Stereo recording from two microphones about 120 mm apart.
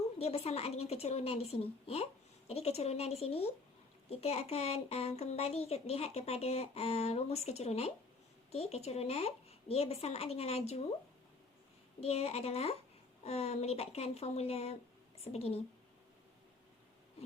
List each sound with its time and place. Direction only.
0.2 s a child's voice: 60° left (ahead or behind)
11.9 s a child's voice: 55° left (ahead or behind)